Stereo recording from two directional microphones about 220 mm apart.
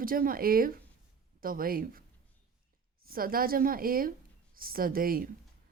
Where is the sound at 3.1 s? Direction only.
40° right (ahead or behind).